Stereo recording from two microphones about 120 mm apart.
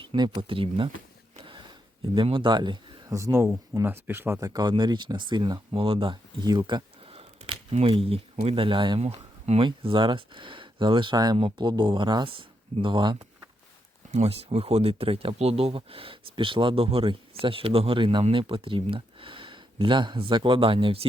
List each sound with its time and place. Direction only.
0.0 s speech: 45° right (ahead or behind)
1.5 s a sound: 45° right (ahead or behind)
3.1 s speech: 25° right (ahead or behind)
4.4 s speech: 30° right (ahead or behind)
7.1 s a sound: 55° right (ahead or behind)
8.5 s speech: 45° right (ahead or behind)
9.0 s speech: 60° right (ahead or behind)
9.6 s speech: 45° right (ahead or behind)
14.1 s speech: 60° right (ahead or behind)